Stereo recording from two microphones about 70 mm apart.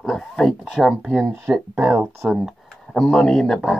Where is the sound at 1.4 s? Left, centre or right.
Right.